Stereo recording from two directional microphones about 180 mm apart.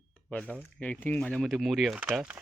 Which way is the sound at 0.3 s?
5° left (ahead or behind).